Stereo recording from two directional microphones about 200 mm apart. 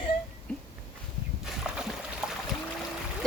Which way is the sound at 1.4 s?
5° right (ahead or behind).